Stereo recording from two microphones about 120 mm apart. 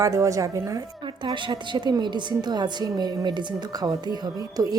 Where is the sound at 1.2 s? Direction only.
40° right (ahead or behind).